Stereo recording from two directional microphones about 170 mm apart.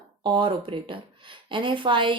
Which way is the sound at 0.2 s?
30° right (ahead or behind).